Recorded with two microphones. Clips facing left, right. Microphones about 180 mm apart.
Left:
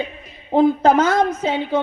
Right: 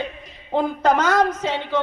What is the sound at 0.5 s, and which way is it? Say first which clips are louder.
Speech: left 5 dB; 30° left (ahead or behind).